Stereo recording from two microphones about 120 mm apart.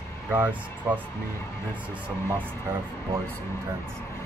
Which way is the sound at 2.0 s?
15° right (ahead or behind).